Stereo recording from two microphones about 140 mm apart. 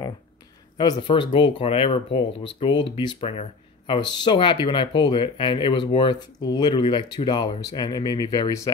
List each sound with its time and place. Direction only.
0.7 s speech: 35° left (ahead or behind)